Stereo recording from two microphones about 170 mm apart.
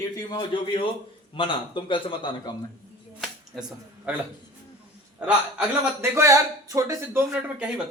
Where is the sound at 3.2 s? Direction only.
Centre (ahead or behind).